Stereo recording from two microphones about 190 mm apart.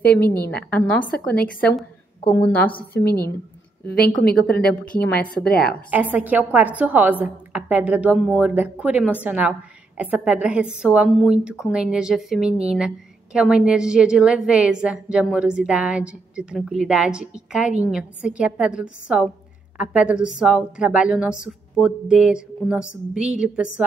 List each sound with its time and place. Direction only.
0.1 s a woman's voice: 55° left (ahead or behind)
0.7 s a woman's voice: 5° left (ahead or behind)
4.2 s a woman's voice: 55° left (ahead or behind)
4.6 s a woman's voice: 5° left (ahead or behind)
5.3 s a woman's voice: 55° left (ahead or behind)
5.9 s a woman's voice: 10° right (ahead or behind)